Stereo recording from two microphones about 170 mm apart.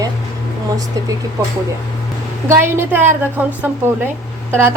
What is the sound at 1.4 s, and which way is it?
A woman's voice, 15° right (ahead or behind).